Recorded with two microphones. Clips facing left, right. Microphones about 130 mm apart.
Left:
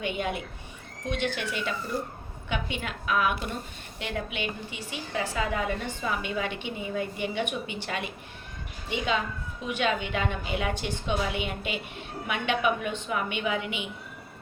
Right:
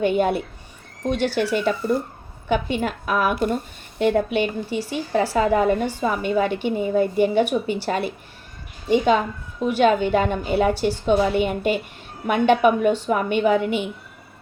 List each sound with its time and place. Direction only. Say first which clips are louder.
0.0 s a woman's voice: right 11 dB; 40° right (ahead or behind)